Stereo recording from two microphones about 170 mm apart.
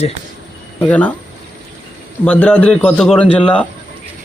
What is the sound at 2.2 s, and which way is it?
A man's voice, 5° left (ahead or behind).